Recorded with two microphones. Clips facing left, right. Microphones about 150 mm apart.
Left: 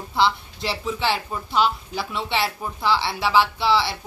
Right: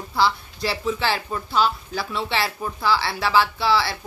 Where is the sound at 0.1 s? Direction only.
20° left (ahead or behind).